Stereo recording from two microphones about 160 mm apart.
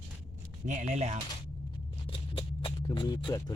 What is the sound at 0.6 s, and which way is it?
Speech, 50° right (ahead or behind).